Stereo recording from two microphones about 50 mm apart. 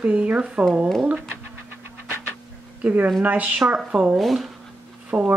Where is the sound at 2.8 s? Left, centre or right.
Right.